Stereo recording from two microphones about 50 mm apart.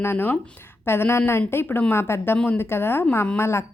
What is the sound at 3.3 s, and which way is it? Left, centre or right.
Speech, left.